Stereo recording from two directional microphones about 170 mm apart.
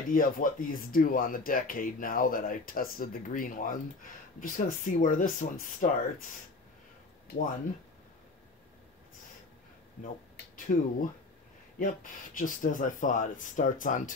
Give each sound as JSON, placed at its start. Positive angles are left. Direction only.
{"t": 0.1, "sound": "speech", "side_deg": 55}
{"t": 10.5, "sound": "speech", "side_deg": 50}